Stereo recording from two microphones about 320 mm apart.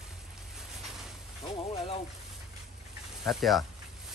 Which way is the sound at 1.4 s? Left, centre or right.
Centre.